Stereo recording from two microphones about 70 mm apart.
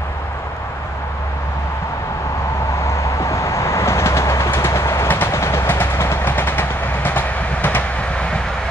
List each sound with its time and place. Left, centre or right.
2.8 s train: left